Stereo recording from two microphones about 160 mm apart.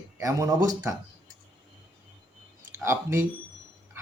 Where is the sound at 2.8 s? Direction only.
15° right (ahead or behind).